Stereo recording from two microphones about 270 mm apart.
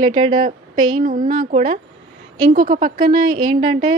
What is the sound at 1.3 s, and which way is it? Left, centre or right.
A woman's voice, right.